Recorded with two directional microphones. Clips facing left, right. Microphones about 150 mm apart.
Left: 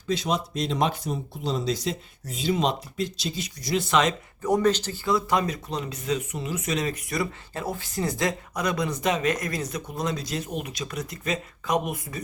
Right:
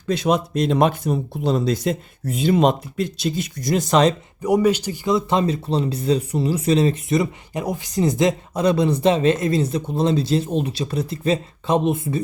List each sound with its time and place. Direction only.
0.1 s speech: 60° right (ahead or behind); by 4.1 s 40° right (ahead or behind)
4.4 s speech: 10° right (ahead or behind); by 12.2 s 25° right (ahead or behind)